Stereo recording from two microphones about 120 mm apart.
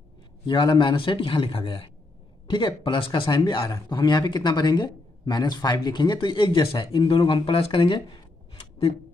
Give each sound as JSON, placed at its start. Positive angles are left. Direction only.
{"t": 0.5, "sound": "a man's voice", "side_deg": 40}